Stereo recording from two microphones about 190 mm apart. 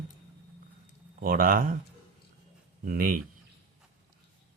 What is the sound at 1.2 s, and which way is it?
Speech, 50° right (ahead or behind).